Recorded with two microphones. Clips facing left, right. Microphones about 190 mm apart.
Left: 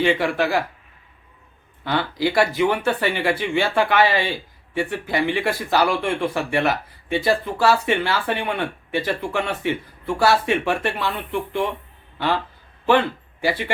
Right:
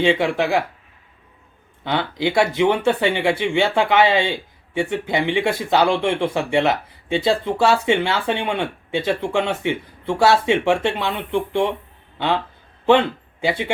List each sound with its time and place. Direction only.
0.0 s speech: 20° right (ahead or behind)
1.8 s a man's voice: 20° right (ahead or behind)